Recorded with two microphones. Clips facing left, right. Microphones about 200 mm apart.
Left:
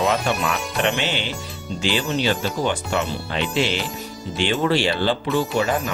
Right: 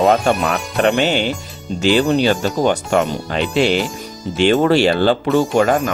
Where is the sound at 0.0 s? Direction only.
50° right (ahead or behind).